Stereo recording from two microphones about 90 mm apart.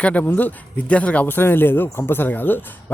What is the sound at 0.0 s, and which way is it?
Speech, 15° left (ahead or behind).